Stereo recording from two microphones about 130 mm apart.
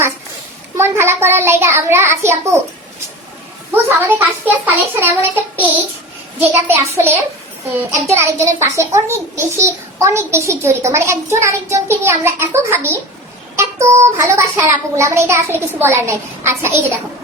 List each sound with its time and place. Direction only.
0.8 s a child's voice: 20° right (ahead or behind)
4.4 s child singing: 15° right (ahead or behind)
7.8 s a child's voice: 20° right (ahead or behind)